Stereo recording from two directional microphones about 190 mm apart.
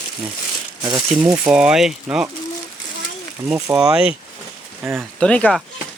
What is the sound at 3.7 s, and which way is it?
Speech, 5° right (ahead or behind).